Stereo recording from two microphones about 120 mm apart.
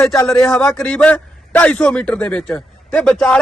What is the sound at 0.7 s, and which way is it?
A man's voice, 10° left (ahead or behind).